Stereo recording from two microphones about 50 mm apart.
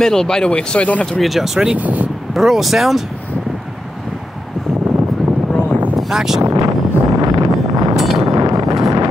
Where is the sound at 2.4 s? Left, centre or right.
Centre.